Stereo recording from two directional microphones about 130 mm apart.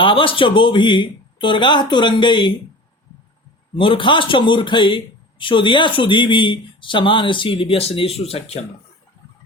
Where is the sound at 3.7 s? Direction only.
40° left (ahead or behind).